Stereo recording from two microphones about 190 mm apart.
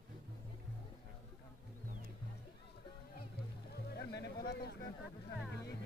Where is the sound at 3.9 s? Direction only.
60° left (ahead or behind).